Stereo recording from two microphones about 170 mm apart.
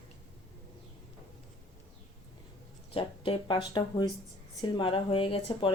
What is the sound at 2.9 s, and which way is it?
Speech, 30° left (ahead or behind).